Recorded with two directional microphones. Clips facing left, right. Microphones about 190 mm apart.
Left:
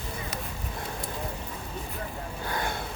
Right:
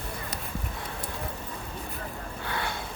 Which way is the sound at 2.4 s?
45° left (ahead or behind).